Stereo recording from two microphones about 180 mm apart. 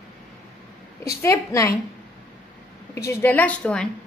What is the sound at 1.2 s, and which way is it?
Speech, 15° left (ahead or behind).